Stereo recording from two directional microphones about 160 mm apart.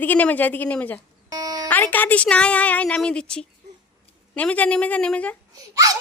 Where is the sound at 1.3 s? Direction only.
25° right (ahead or behind).